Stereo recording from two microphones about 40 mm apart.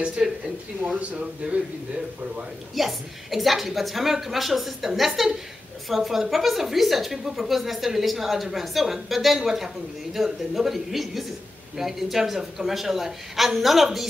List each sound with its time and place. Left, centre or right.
0.2 s a woman's voice: right
1.4 s speech: right
2.7 s a woman's voice: centre